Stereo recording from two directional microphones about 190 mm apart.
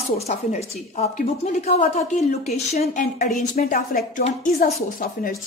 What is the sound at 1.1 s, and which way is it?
A woman's voice, 35° left (ahead or behind).